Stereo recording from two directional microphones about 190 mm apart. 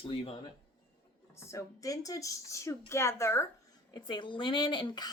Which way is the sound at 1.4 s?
15° left (ahead or behind).